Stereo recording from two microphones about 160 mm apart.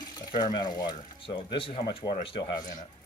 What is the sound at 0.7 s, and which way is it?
Speech, 30° left (ahead or behind).